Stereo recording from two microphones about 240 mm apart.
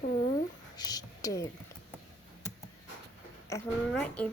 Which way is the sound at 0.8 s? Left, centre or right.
Centre.